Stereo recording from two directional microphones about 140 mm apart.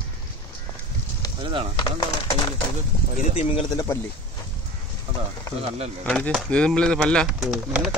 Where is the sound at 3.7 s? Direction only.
25° left (ahead or behind).